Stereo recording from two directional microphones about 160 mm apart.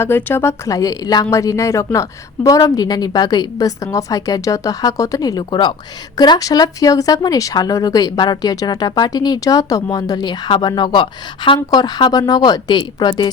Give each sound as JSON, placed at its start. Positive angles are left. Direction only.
{"t": 0.0, "sound": "a woman's voice", "side_deg": 15}